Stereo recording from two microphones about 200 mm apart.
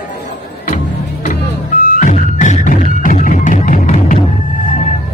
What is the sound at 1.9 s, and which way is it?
Music, 40° left (ahead or behind).